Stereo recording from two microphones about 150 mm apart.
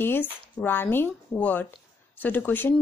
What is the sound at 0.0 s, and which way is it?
Speech, 15° left (ahead or behind).